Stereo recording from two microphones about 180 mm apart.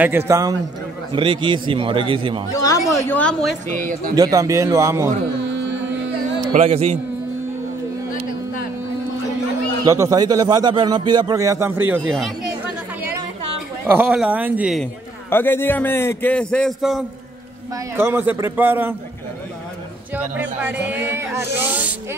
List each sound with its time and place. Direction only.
0.0 s speech: 10° right (ahead or behind); by 2.4 s 30° right (ahead or behind)
2.5 s speech: 20° left (ahead or behind)
3.1 s a man's voice: 5° left (ahead or behind)
4.1 s speech: 20° right (ahead or behind)
5.5 s carnatic music: 90° right
6.5 s speech: 35° right (ahead or behind)
9.8 s speech: 20° right (ahead or behind)
13.8 s speech: 5° right (ahead or behind)
15.2 s a man's voice: 10° left (ahead or behind)
17.9 s speech: 10° right (ahead or behind)
20.3 s speech: 10° right (ahead or behind)